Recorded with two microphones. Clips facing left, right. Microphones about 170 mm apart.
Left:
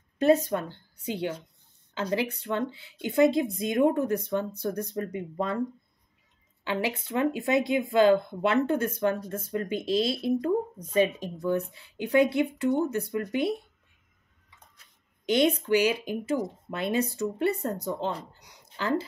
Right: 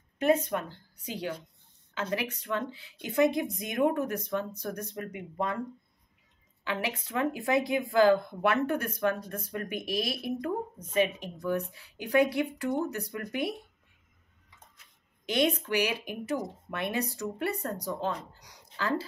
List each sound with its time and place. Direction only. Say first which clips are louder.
0.3 s speech: left 3 dB; 35° left (ahead or behind)
6.6 s speech: left 4 dB; 30° left (ahead or behind)
15.2 s speech: left 4 dB; 25° left (ahead or behind)